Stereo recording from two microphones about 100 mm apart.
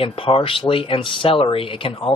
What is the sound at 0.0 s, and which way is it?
Speech, 65° left (ahead or behind).